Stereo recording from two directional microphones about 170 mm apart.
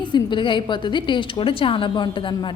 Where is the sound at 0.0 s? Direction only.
25° left (ahead or behind).